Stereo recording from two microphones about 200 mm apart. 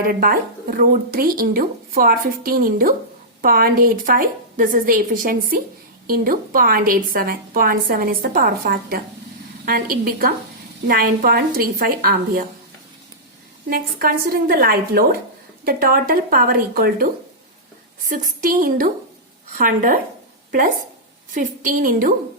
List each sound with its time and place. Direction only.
0.0 s speech: 45° right (ahead or behind)
13.7 s speech: 45° right (ahead or behind)
18.1 s speech: 45° right (ahead or behind)
21.3 s speech: 40° right (ahead or behind)